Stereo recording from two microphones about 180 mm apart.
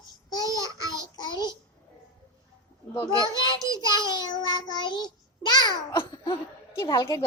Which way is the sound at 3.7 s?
25° left (ahead or behind).